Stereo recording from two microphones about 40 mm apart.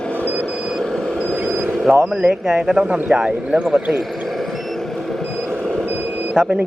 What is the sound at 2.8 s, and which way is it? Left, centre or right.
Speech, right.